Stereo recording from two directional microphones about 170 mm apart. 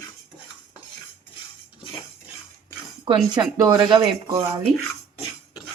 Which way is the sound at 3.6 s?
20° right (ahead or behind).